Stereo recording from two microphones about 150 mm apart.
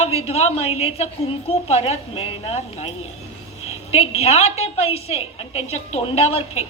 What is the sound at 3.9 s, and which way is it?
A man's voice, 45° left (ahead or behind).